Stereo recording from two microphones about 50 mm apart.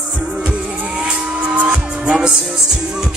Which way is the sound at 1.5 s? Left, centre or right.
Right.